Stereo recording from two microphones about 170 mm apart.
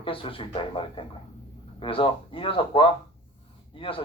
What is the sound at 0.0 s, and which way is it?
Speech, 30° left (ahead or behind).